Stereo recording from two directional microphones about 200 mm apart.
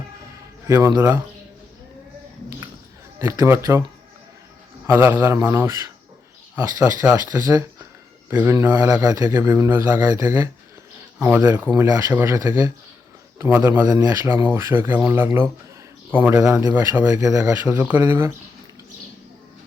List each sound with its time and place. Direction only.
0.7 s a man's voice: 15° right (ahead or behind)
3.2 s a man's voice: 15° right (ahead or behind)
4.9 s a man's voice: 10° right (ahead or behind)